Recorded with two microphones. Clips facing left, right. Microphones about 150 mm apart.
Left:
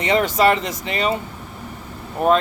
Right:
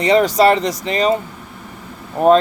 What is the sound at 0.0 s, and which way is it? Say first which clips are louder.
Speech: right 4 dB; 35° right (ahead or behind).